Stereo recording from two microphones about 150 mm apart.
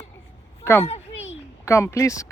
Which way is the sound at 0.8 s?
45° left (ahead or behind).